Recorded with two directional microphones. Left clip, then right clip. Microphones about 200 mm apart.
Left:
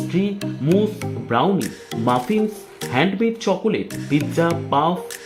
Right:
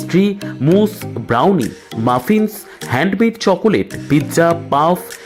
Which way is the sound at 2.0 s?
25° right (ahead or behind).